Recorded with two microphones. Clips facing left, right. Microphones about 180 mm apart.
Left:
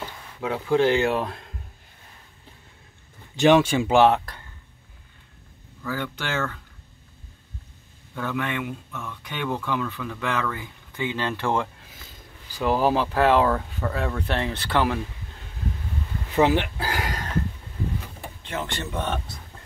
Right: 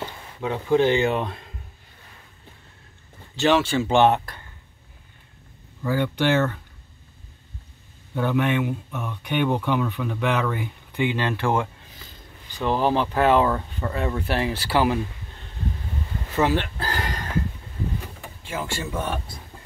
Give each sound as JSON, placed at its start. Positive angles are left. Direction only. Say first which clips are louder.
{"t": 0.4, "sound": "speech", "louder": "right 1 dB", "side_deg": 0}
{"t": 3.3, "sound": "speech", "louder": "left 3 dB", "side_deg": 15}
{"t": 5.9, "sound": "speech", "louder": "right 8 dB", "side_deg": -20}
{"t": 8.1, "sound": "speech", "louder": "right 6 dB", "side_deg": -20}
{"t": 12.5, "sound": "speech", "louder": "even", "side_deg": 5}
{"t": 16.3, "sound": "a sound", "louder": "left 2 dB", "side_deg": 15}
{"t": 18.4, "sound": "speech", "louder": "right 1 dB", "side_deg": -5}